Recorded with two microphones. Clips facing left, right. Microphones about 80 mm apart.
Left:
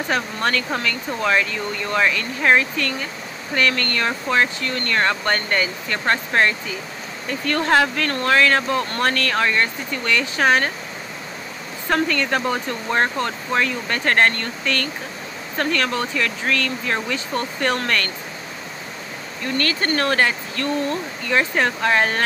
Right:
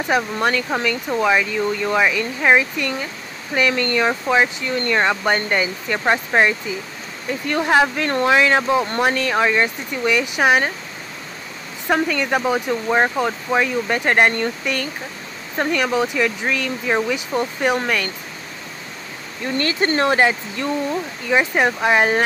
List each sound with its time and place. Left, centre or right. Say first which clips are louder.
0.1 s speech: right 3 dB; centre
11.9 s speech: right 1 dB; centre
19.4 s speech: right 2 dB; right